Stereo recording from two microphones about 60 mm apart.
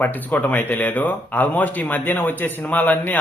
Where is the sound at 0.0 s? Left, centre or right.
Left.